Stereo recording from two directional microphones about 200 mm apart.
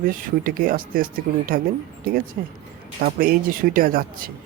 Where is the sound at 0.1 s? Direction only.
45° right (ahead or behind).